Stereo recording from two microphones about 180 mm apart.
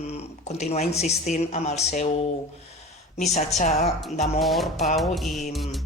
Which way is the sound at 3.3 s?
40° left (ahead or behind).